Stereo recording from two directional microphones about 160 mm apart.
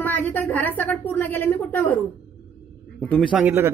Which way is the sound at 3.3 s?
10° right (ahead or behind).